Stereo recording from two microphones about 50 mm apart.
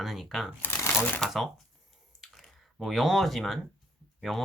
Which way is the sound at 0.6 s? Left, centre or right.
Left.